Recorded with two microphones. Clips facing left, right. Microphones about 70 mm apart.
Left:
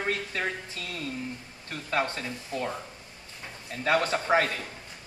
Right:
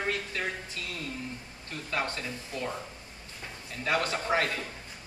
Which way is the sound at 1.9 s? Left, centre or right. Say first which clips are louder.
Left 4 dB; left.